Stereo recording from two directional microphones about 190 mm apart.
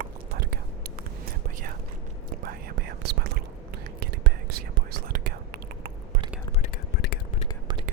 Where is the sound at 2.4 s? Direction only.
55° right (ahead or behind).